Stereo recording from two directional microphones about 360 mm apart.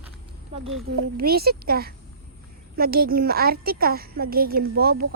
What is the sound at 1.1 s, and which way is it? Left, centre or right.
Speech, right.